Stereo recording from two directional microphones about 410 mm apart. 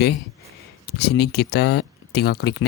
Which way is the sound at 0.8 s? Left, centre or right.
Left.